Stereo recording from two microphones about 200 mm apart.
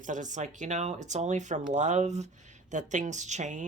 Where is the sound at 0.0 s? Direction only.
40° right (ahead or behind).